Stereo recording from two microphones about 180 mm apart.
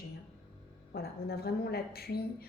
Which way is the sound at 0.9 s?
60° left (ahead or behind).